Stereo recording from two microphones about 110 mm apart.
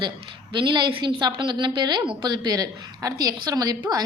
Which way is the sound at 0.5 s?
45° right (ahead or behind).